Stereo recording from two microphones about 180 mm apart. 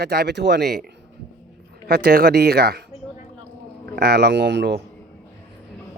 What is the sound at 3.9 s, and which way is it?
Speech, 60° right (ahead or behind).